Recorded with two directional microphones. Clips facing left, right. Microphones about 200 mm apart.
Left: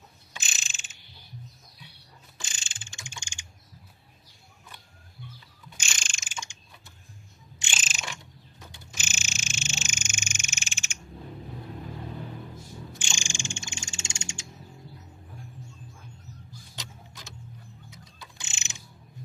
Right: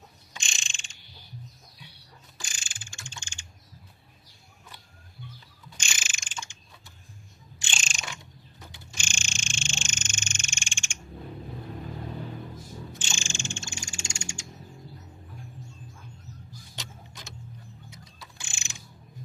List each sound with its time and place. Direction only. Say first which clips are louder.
0.3 s mechanisms: even; 5° left (ahead or behind)
2.4 s mechanisms: even; 25° left (ahead or behind)
6.0 s mechanisms: right 1 dB; 5° right (ahead or behind)
6.2 s mechanisms: left 2 dB; 15° left (ahead or behind)
7.8 s a sound: even; 5° left (ahead or behind)
9.0 s frog: even; 5° left (ahead or behind)
13.0 s frog: right 1 dB; 15° left (ahead or behind)
18.3 s a sound: right 1 dB; 20° left (ahead or behind)